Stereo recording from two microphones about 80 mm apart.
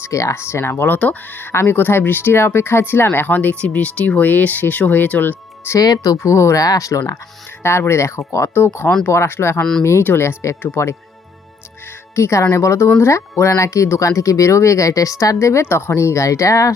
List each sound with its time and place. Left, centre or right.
0.0 s speech: left; by 5.4 s centre
5.8 s speech: left
6.1 s speech: left
12.1 s speech: left